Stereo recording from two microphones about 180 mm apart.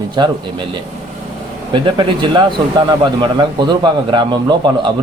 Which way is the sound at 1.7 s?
25° right (ahead or behind).